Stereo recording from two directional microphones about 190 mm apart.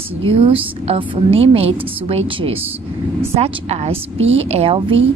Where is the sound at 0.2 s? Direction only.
30° right (ahead or behind).